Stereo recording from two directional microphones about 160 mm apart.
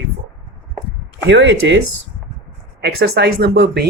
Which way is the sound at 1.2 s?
90° right.